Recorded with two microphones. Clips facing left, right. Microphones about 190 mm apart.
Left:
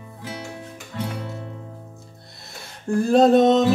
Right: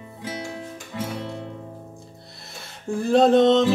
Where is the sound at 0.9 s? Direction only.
15° right (ahead or behind).